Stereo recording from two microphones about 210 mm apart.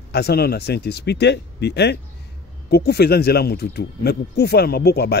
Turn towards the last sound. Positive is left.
turn(degrees=50)  # may be behind; listen again after turning